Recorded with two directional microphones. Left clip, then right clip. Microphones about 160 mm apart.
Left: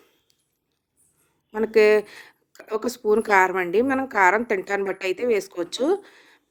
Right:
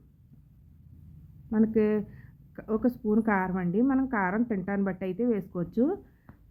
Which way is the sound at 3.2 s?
35° left (ahead or behind).